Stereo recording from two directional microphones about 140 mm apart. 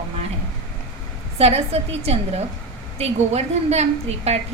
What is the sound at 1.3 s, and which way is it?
A woman's voice, 45° right (ahead or behind).